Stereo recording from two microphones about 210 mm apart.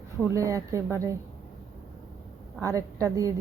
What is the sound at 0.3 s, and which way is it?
Speech, 15° right (ahead or behind).